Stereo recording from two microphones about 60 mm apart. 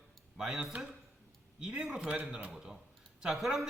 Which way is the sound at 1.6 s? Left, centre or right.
Centre.